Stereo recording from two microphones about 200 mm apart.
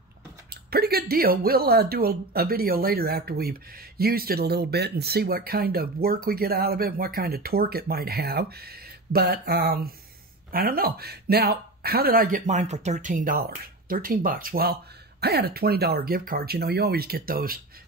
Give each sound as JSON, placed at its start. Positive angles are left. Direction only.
{"t": 0.5, "sound": "speech", "side_deg": -50}